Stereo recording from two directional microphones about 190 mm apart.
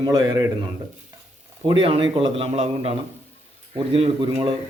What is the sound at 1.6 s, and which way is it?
Speech, 30° right (ahead or behind).